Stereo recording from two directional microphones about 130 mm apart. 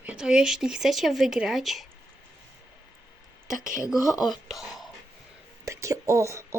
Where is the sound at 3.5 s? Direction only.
90° right.